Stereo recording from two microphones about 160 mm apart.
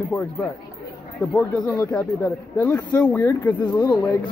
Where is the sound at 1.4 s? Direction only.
20° left (ahead or behind).